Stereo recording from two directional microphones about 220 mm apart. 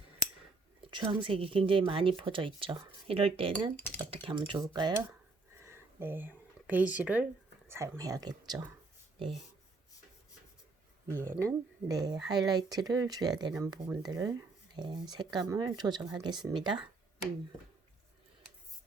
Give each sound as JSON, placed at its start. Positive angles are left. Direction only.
{"t": 0.2, "sound": "a sound", "side_deg": 40}
{"t": 0.8, "sound": "speech", "side_deg": -20}
{"t": 3.8, "sound": "cutlery", "side_deg": 5}
{"t": 4.1, "sound": "speech", "side_deg": -25}
{"t": 5.5, "sound": "a sound", "side_deg": -10}
{"t": 7.7, "sound": "speech", "side_deg": -15}
{"t": 11.1, "sound": "speech", "side_deg": -10}